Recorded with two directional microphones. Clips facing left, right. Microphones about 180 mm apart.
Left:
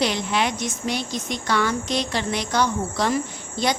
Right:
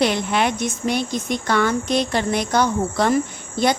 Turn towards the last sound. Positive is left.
turn(degrees=-55)  # may be behind; listen again after turning